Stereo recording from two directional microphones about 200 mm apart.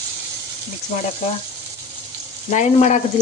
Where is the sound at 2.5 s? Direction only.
35° left (ahead or behind).